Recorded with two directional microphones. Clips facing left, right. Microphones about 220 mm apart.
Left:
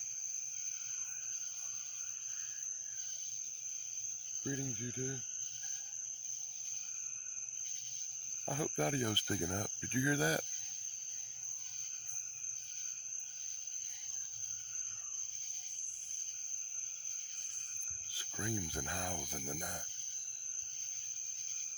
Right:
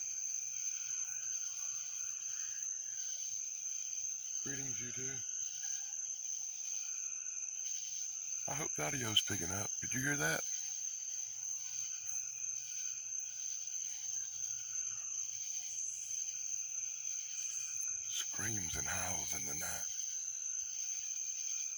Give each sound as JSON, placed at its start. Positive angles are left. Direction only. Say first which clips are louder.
{"t": 8.4, "sound": "cricket", "louder": "left 7 dB", "side_deg": 35}
{"t": 18.1, "sound": "speech", "louder": "left 7 dB", "side_deg": 40}